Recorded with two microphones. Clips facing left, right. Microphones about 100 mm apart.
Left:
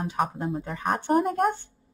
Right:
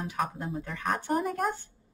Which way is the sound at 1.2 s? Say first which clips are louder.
Left 6 dB; centre (ahead or behind).